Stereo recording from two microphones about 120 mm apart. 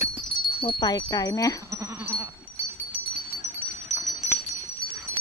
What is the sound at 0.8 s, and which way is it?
Wind chime, 35° left (ahead or behind).